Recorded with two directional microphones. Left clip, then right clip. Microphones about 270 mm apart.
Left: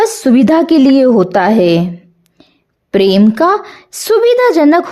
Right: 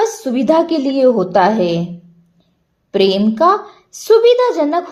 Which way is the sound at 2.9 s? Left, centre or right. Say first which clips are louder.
Left 4 dB; left.